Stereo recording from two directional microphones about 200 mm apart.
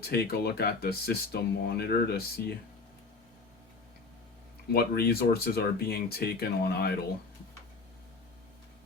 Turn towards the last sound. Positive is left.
turn(degrees=50)  # may be behind; listen again after turning